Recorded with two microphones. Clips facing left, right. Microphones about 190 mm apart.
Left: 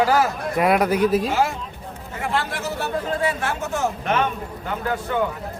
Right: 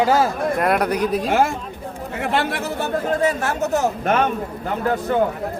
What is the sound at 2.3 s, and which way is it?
Speech, 65° right (ahead or behind).